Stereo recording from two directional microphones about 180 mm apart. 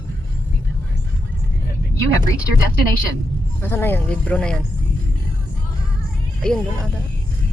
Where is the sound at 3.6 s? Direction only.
10° left (ahead or behind).